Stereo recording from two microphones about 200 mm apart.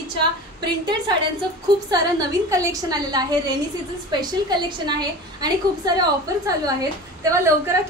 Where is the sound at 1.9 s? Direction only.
20° right (ahead or behind).